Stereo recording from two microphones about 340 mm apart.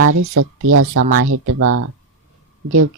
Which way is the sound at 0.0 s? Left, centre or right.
Right.